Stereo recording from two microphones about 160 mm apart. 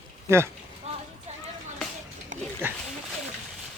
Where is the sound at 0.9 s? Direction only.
40° right (ahead or behind).